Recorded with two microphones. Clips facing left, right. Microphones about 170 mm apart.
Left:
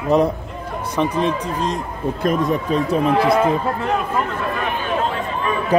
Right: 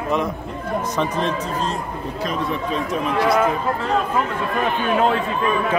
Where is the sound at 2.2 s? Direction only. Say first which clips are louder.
Left 5 dB; 45° left (ahead or behind).